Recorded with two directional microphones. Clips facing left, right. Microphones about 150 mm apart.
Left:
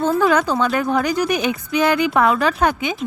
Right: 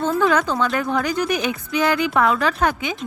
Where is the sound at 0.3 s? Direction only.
20° left (ahead or behind).